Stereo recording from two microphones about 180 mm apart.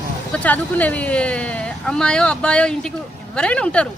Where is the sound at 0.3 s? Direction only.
10° left (ahead or behind).